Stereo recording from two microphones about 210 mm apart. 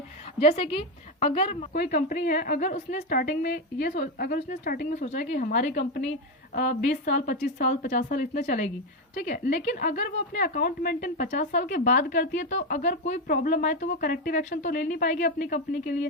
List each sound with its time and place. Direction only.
0.3 s a woman's voice: 30° left (ahead or behind)
1.7 s a woman's voice: 45° left (ahead or behind)
6.8 s a woman's voice: 50° left (ahead or behind)
7.1 s speech: 35° left (ahead or behind)